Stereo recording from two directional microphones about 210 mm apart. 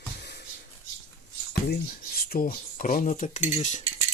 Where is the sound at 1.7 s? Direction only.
45° left (ahead or behind).